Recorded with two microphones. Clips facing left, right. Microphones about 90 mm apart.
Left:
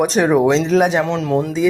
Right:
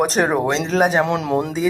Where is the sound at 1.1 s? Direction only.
15° right (ahead or behind).